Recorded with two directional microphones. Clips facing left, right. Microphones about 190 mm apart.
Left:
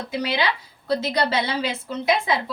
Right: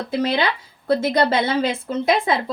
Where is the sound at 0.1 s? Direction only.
55° right (ahead or behind).